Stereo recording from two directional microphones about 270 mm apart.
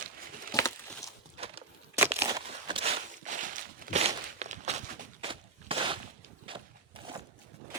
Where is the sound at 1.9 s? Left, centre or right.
Centre.